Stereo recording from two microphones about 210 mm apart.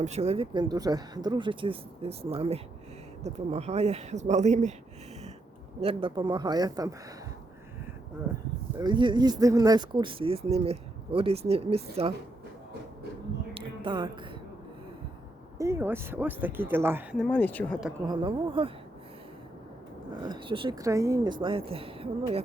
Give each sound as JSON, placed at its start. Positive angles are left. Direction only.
{"t": 0.0, "sound": "speech", "side_deg": -30}
{"t": 5.8, "sound": "speech", "side_deg": -25}
{"t": 8.8, "sound": "speech", "side_deg": -20}
{"t": 13.5, "sound": "music", "side_deg": -25}
{"t": 15.5, "sound": "speech", "side_deg": -15}
{"t": 17.2, "sound": "speech", "side_deg": 10}
{"t": 18.0, "sound": "speech", "side_deg": -20}
{"t": 20.2, "sound": "speech", "side_deg": -20}